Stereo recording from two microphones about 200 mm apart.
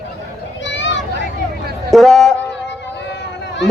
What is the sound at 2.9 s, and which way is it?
Run, 60° left (ahead or behind).